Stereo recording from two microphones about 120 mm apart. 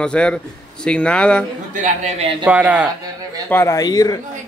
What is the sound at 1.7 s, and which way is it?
Speech, 80° right.